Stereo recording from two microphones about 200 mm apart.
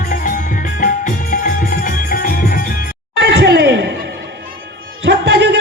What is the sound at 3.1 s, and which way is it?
Laughter, 55° right (ahead or behind).